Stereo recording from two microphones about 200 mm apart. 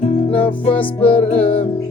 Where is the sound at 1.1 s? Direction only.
30° left (ahead or behind).